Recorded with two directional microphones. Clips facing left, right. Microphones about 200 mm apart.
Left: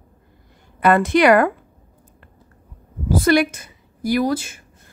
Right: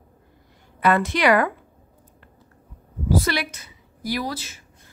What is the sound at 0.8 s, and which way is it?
Speech, 50° left (ahead or behind).